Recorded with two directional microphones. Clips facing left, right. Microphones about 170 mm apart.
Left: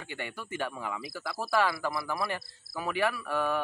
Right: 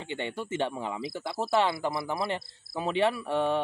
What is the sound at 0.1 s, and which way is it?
Speech, 25° right (ahead or behind).